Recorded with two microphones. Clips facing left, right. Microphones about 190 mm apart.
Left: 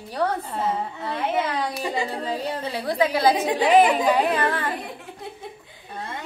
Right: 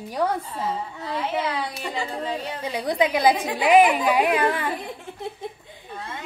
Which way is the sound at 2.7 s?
15° right (ahead or behind).